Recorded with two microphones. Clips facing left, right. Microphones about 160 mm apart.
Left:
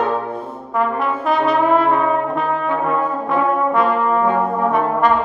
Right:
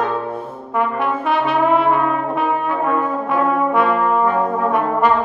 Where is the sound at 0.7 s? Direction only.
Centre (ahead or behind).